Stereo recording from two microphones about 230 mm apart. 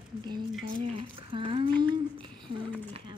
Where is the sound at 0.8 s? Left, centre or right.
Right.